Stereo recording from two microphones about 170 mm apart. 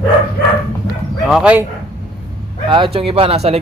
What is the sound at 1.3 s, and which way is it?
Speech, 5° right (ahead or behind).